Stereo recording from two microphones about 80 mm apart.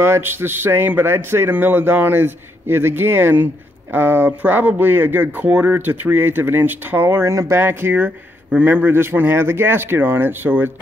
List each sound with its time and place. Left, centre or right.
0.0 s a man's voice: right